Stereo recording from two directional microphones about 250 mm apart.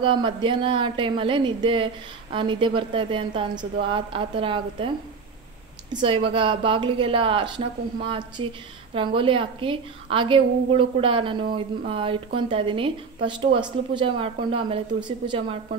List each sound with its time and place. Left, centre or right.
0.0 s a woman's voice: centre